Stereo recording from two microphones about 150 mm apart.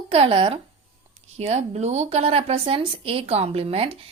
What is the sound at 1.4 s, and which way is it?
Speech, 45° right (ahead or behind).